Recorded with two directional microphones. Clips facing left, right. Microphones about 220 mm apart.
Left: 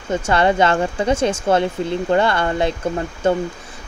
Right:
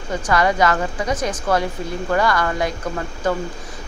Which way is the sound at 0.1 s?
30° left (ahead or behind).